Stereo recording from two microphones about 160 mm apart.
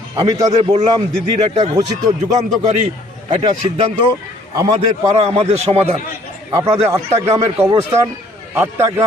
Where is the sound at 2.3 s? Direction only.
50° right (ahead or behind).